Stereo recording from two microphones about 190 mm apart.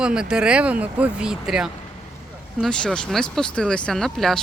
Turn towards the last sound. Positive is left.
turn(degrees=5)  # may be behind; listen again after turning